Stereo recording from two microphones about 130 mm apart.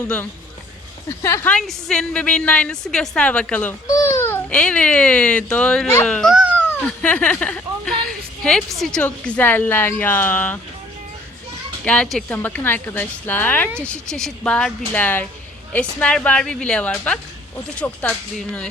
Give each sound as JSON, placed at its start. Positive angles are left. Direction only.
{"t": 0.0, "sound": "a woman's voice", "side_deg": 10}
{"t": 1.5, "sound": "a woman's voice", "side_deg": 5}
{"t": 3.8, "sound": "baby cry", "side_deg": 25}
{"t": 4.4, "sound": "a woman's voice", "side_deg": 10}
{"t": 11.9, "sound": "a woman's voice", "side_deg": 5}